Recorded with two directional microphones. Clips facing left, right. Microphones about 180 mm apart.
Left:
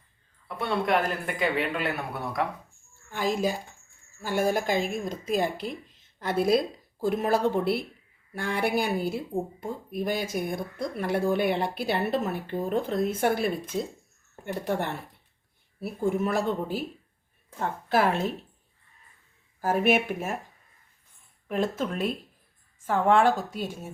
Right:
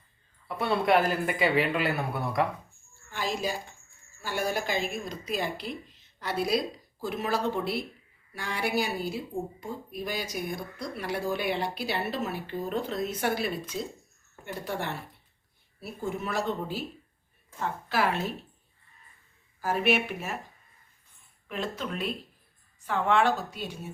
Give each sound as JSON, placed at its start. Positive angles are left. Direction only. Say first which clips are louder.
{"t": 0.4, "sound": "speech", "louder": "right 2 dB", "side_deg": -5}
{"t": 3.1, "sound": "speech", "louder": "left 4 dB", "side_deg": 50}
{"t": 19.6, "sound": "speech", "louder": "left 3 dB", "side_deg": 45}
{"t": 21.5, "sound": "speech", "louder": "left 6 dB", "side_deg": 45}